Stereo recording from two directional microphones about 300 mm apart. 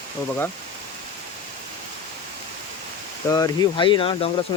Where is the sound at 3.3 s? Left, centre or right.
Centre.